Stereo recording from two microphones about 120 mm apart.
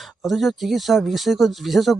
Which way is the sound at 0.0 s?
Centre (ahead or behind).